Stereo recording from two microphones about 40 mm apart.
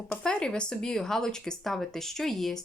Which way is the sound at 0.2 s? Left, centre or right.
Centre.